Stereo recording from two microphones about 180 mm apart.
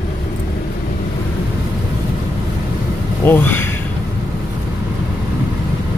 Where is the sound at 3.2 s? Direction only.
10° left (ahead or behind).